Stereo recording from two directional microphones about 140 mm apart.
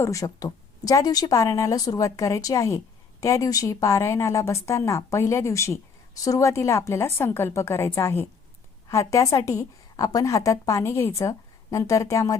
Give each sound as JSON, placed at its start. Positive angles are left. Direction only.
{"t": 0.0, "sound": "speech", "side_deg": 25}